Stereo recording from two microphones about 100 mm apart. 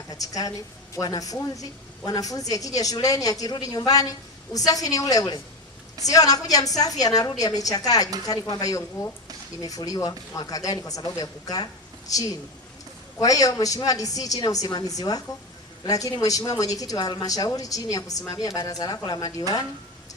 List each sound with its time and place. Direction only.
0.1 s a woman's voice: 35° left (ahead or behind)
13.1 s speech: 35° left (ahead or behind)